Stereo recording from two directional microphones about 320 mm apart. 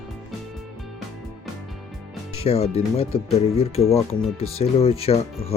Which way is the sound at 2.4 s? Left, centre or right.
Centre.